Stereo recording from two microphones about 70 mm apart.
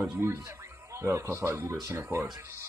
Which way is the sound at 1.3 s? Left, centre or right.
Right.